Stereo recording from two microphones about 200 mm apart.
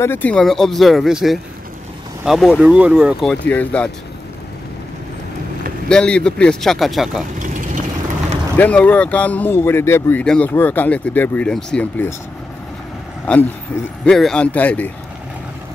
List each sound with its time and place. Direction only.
0.0 s speech: 10° left (ahead or behind)
5.9 s speech: 5° left (ahead or behind)
7.3 s vehicle: 40° right (ahead or behind)
8.5 s speech: 10° left (ahead or behind)
13.3 s speech: 5° left (ahead or behind)